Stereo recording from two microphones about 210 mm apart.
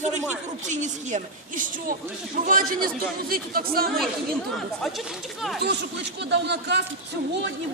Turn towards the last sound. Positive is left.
turn(degrees=-55)  # may be behind; listen again after turning